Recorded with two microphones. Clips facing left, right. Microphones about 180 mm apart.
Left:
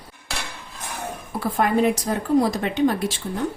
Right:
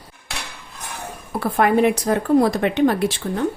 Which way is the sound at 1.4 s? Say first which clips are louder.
Right 3 dB; 60° right (ahead or behind).